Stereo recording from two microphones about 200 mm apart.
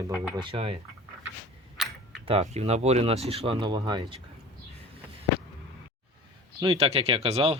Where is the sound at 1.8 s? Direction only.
Centre (ahead or behind).